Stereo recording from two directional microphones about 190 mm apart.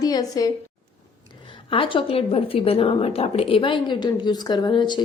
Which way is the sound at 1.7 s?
25° left (ahead or behind).